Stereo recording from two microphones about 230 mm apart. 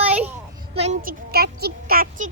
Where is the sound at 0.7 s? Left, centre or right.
Right.